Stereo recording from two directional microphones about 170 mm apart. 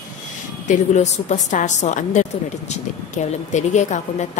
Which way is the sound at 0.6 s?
45° left (ahead or behind).